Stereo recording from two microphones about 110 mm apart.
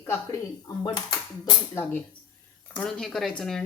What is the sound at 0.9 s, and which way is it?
Speech, 40° left (ahead or behind).